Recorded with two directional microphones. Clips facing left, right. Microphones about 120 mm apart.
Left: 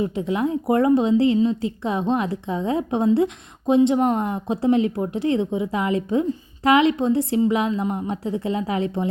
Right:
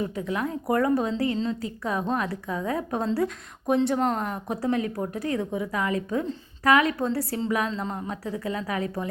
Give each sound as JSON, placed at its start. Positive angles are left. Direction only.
{"t": 0.0, "sound": "a woman's voice", "side_deg": 25}